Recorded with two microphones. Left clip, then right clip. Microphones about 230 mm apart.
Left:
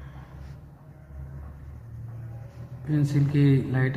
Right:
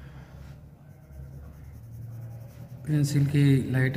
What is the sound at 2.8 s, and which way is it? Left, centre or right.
Speech, right.